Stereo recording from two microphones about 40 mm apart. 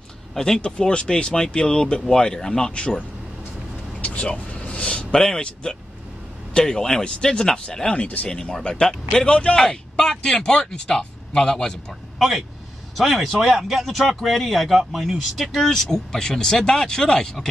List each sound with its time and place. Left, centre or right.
0.6 s speech: left
2.7 s speech: left
4.0 s vehicle: left
5.2 s speech: centre
8.0 s speech: left
8.3 s speech: centre
9.6 s speech: centre
12.2 s speech: centre